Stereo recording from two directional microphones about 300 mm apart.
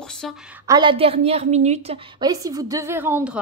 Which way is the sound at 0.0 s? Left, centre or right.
Centre.